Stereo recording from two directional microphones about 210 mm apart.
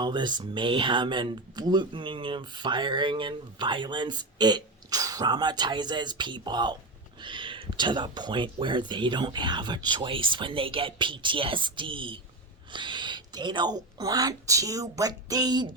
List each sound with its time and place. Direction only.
0.0 s speech: 20° right (ahead or behind)